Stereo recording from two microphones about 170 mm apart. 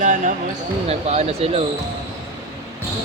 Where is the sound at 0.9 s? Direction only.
40° right (ahead or behind).